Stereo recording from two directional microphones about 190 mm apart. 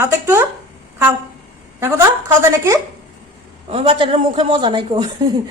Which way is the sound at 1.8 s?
15° right (ahead or behind).